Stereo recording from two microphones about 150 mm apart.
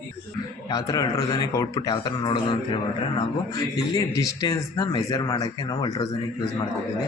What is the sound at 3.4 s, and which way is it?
A man's voice, 25° left (ahead or behind).